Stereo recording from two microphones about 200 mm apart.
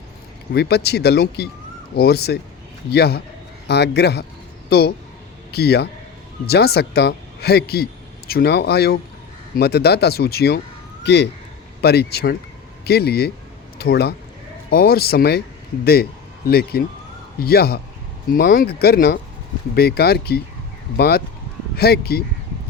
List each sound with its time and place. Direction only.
0.5 s a man's voice: 55° left (ahead or behind)